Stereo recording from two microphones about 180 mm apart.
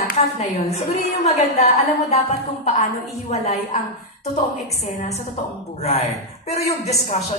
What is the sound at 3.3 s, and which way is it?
Speech, 35° left (ahead or behind).